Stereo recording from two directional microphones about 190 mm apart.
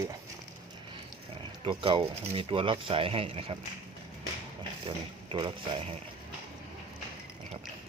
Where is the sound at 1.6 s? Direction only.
30° right (ahead or behind).